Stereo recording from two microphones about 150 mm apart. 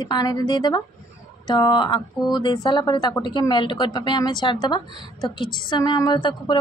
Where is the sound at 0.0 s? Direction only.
30° left (ahead or behind).